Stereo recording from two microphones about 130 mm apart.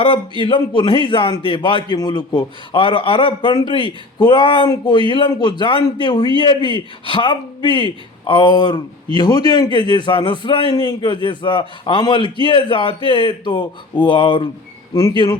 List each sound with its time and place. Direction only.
0.0 s a man's voice: 40° left (ahead or behind)